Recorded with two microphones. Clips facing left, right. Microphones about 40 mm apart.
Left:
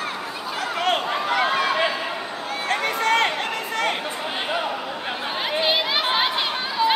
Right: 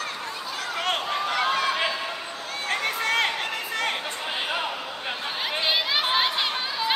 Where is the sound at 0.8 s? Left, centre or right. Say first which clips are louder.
Left 4 dB; centre.